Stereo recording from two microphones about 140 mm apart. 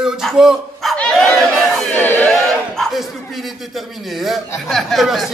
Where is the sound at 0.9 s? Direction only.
5° left (ahead or behind).